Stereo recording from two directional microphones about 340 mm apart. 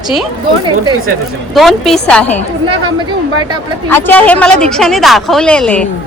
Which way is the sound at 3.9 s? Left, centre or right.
Centre.